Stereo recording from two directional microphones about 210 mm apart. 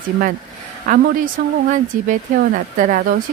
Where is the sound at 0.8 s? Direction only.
40° right (ahead or behind).